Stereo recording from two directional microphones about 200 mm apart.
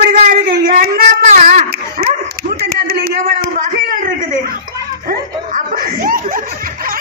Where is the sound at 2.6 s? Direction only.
50° right (ahead or behind).